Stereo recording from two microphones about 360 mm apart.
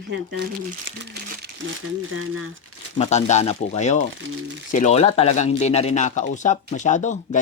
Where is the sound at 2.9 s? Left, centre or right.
Centre.